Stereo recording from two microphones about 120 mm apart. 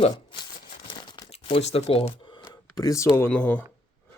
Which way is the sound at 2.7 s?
25° left (ahead or behind).